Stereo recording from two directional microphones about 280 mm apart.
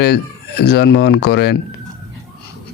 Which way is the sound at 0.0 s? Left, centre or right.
Left.